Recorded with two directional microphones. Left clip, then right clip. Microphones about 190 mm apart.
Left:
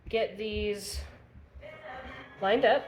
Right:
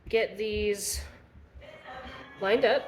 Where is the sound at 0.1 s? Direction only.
40° right (ahead or behind).